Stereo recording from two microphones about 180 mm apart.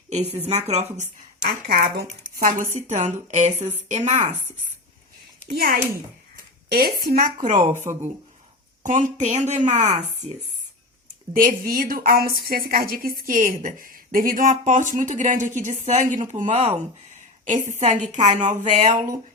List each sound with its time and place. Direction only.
0.1 s a woman's voice: 35° right (ahead or behind)
1.5 s a woman's voice: 60° right (ahead or behind); by 4.3 s 40° right (ahead or behind)
5.5 s speech: 55° right (ahead or behind)
6.3 s a sound: 60° right (ahead or behind)
7.3 s a woman's voice: 45° right (ahead or behind)
7.7 s speech: 15° right (ahead or behind)
8.8 s a woman's voice: 45° right (ahead or behind)
11.3 s a woman's voice: 50° right (ahead or behind)